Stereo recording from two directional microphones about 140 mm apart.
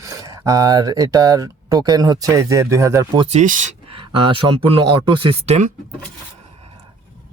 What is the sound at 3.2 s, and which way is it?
Speech, 50° right (ahead or behind).